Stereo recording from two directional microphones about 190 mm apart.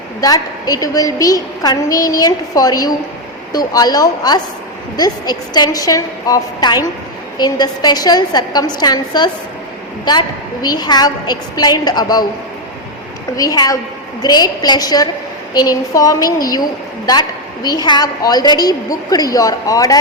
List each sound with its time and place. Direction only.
0.2 s a woman's voice: 20° left (ahead or behind)
13.3 s a woman's voice: 20° left (ahead or behind)